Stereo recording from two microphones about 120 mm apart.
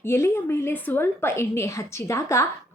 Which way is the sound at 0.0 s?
20° left (ahead or behind).